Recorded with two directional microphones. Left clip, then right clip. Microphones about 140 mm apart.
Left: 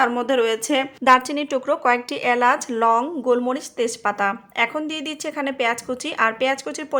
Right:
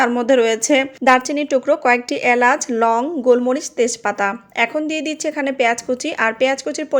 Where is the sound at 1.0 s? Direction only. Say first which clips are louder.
Right 2 dB; 15° right (ahead or behind).